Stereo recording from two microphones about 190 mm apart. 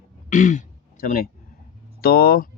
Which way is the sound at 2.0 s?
50° left (ahead or behind).